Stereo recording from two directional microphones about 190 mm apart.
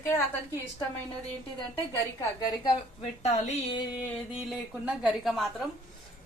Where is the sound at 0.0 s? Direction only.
15° left (ahead or behind).